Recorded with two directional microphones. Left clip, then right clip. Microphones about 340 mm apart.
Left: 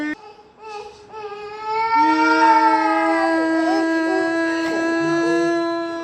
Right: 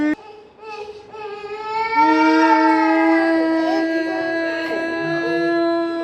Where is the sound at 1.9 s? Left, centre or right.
Centre.